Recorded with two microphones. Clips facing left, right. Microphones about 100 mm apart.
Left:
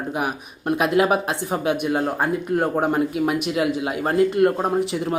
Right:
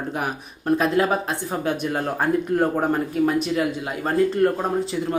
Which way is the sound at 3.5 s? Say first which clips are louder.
Left 2 dB; 20° left (ahead or behind).